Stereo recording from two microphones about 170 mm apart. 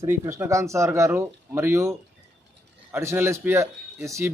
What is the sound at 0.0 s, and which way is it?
A man's voice, 15° right (ahead or behind).